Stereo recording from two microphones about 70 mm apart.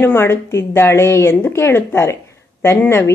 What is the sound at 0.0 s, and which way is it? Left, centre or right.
A woman's voice, left.